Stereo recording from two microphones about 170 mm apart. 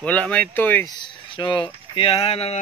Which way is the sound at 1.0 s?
25° left (ahead or behind).